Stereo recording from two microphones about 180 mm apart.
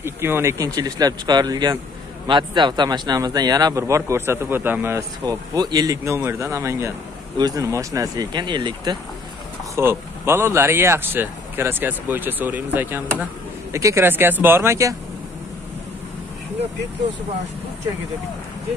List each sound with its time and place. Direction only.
0.0 s speech: 15° right (ahead or behind)
9.8 s speech: 15° right (ahead or behind)